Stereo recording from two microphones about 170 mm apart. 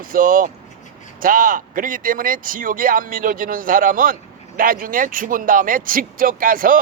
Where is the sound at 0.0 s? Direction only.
55° right (ahead or behind).